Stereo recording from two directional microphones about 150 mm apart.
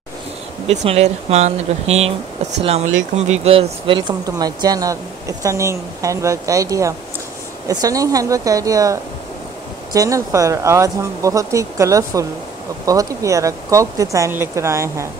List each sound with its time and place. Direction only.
0.7 s speech: 45° right (ahead or behind); by 15.0 s 20° right (ahead or behind)